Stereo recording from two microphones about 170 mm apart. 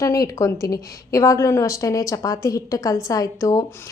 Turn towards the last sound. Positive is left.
turn(degrees=20)  # may be behind; listen again after turning